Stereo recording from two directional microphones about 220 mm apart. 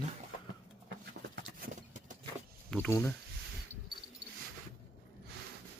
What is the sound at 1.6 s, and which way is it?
Clip-clop, 35° right (ahead or behind).